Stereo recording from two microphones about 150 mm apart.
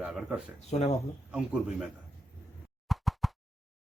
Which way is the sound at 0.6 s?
45° left (ahead or behind).